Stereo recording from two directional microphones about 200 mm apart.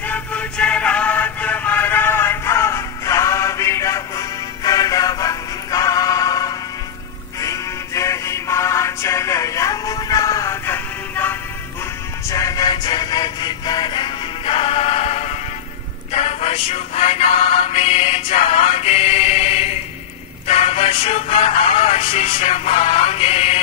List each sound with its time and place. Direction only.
0.0 s music: 5° left (ahead or behind); by 23.6 s 30° left (ahead or behind)